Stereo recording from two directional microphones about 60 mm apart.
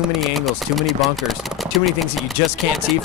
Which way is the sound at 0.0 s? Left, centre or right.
Centre.